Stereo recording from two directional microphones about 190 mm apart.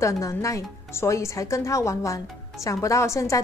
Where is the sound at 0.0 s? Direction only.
15° left (ahead or behind).